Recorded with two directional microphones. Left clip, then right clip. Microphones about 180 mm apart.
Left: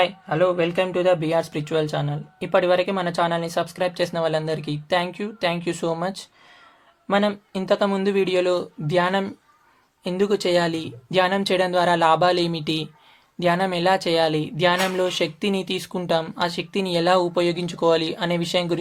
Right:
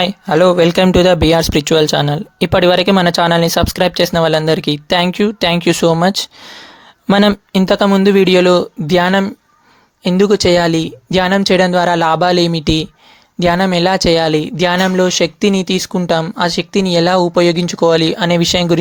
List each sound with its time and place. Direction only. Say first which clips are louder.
0.0 s speech: right 9 dB; 85° right; by 18.8 s 50° right (ahead or behind)